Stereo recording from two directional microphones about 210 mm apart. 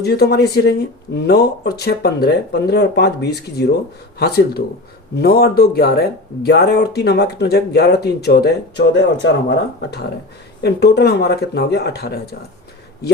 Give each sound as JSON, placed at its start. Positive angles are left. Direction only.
{"t": 0.0, "sound": "speech", "side_deg": 50}